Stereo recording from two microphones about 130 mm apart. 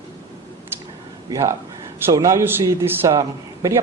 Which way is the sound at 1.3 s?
25° right (ahead or behind).